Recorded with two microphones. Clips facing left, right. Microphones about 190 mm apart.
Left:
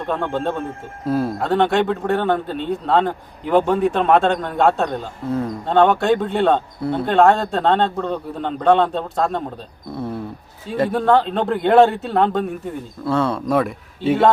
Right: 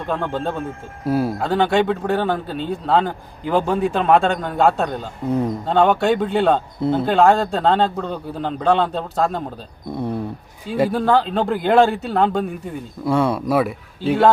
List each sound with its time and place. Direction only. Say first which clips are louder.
0.1 s speech: left 1 dB; centre (ahead or behind)
5.3 s a man's voice: right 2 dB; 15° right (ahead or behind)
5.6 s speech: left 2 dB; centre (ahead or behind)
10.7 s a man's voice: left 1 dB; centre (ahead or behind)